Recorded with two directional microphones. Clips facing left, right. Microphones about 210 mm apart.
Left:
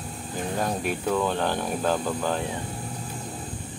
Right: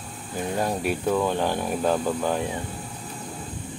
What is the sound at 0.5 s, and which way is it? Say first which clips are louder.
Speech: right 2 dB; 5° right (ahead or behind).